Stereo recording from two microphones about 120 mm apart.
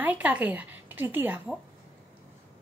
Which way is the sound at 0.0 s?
15° right (ahead or behind).